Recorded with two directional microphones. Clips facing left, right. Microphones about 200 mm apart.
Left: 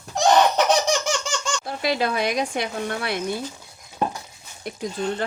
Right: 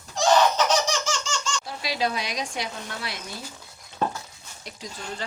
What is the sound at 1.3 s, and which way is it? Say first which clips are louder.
Speech: left 4 dB; 55° left (ahead or behind).